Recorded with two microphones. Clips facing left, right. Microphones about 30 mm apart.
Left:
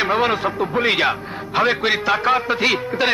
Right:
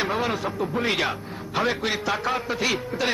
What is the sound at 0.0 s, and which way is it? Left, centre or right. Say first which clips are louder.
A man's voice: left 7 dB; left.